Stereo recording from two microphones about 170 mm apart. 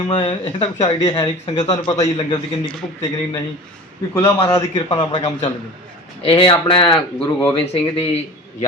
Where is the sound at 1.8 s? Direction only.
20° left (ahead or behind).